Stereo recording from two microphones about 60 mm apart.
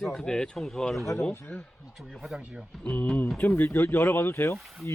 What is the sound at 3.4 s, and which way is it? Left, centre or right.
Speech, left.